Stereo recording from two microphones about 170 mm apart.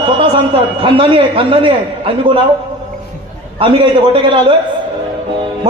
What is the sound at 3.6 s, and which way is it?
Speech, 30° right (ahead or behind).